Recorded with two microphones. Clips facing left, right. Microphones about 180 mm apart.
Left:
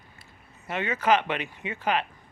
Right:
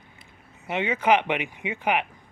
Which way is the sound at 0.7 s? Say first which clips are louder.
Right 2 dB; 15° right (ahead or behind).